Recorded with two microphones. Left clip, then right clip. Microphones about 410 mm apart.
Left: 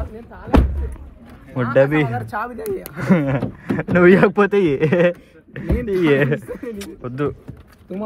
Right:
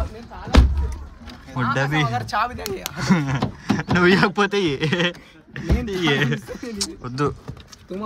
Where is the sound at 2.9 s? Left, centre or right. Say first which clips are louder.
Left 4 dB; centre.